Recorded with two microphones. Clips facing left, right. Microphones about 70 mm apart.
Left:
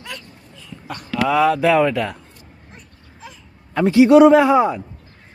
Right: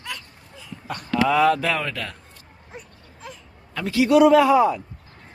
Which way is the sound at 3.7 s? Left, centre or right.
Left.